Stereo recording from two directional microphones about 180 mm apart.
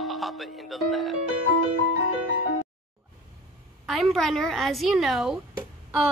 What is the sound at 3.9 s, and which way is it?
A woman's voice, centre (ahead or behind).